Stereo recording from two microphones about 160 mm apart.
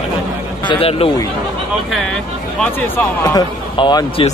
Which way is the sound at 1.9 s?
5° left (ahead or behind).